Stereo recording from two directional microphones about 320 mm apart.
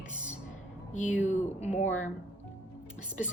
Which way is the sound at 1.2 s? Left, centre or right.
Left.